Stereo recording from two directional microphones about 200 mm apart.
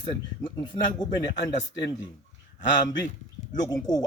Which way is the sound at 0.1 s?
20° left (ahead or behind).